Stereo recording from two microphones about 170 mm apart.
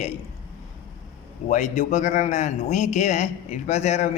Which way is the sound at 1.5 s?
45° left (ahead or behind).